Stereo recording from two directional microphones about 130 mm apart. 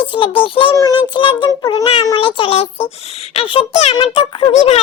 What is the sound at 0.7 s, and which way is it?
A child's voice, 30° left (ahead or behind).